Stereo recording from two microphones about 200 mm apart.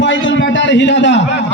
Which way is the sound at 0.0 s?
65° left (ahead or behind).